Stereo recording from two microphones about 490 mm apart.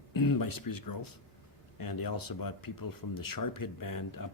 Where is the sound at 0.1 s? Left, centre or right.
Left.